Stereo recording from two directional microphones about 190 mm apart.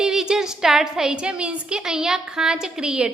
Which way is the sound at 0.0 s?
5° right (ahead or behind).